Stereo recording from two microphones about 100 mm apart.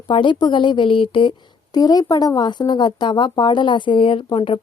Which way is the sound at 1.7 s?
40° left (ahead or behind).